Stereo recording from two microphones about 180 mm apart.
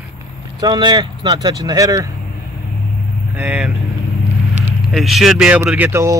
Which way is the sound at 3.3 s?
5° right (ahead or behind).